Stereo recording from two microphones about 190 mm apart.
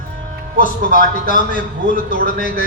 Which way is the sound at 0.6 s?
45° left (ahead or behind).